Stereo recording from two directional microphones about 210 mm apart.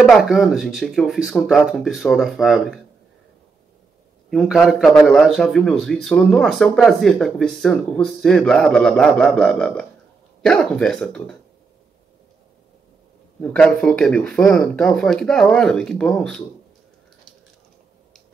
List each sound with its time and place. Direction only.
0.0 s a man's voice: centre (ahead or behind)
4.3 s a man's voice: centre (ahead or behind)
13.4 s a man's voice: 5° left (ahead or behind)